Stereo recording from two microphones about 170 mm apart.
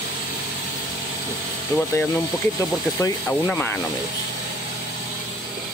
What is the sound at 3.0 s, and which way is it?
Speech, 10° left (ahead or behind).